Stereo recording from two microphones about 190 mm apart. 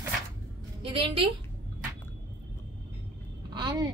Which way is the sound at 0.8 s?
30° right (ahead or behind).